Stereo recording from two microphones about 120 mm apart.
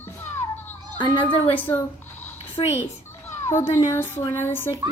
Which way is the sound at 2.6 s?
40° left (ahead or behind).